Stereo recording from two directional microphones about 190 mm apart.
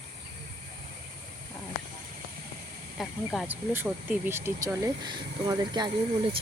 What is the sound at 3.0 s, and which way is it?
Speech, centre (ahead or behind).